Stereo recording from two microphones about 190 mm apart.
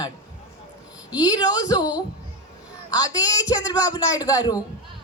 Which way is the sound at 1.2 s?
20° left (ahead or behind).